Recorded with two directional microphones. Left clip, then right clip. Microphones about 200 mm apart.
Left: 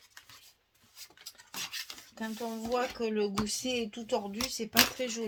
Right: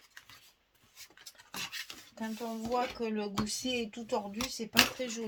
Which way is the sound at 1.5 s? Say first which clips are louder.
Left 1 dB; 15° left (ahead or behind).